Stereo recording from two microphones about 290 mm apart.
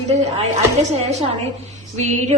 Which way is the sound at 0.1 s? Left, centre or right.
Right.